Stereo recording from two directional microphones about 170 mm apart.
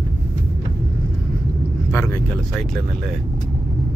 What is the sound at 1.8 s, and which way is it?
Vehicle, 15° left (ahead or behind).